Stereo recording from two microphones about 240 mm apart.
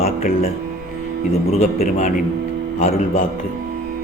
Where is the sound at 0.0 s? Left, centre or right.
Left.